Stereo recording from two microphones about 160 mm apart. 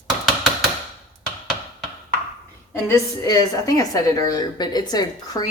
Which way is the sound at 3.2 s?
20° left (ahead or behind).